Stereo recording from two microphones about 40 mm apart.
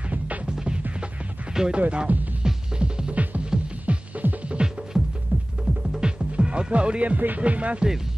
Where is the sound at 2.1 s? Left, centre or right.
Right.